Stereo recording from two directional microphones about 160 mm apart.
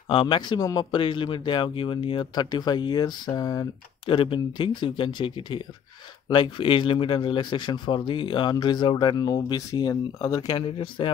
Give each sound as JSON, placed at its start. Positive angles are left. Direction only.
{"t": 0.1, "sound": "speech", "side_deg": 30}